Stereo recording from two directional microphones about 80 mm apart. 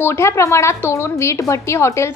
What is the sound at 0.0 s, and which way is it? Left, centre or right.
A woman's voice, left.